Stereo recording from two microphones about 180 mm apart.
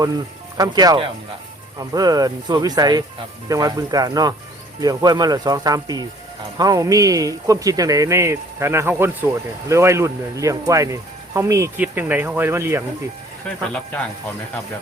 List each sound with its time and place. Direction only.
0.5 s speech: 20° right (ahead or behind)
13.7 s speech: 5° left (ahead or behind)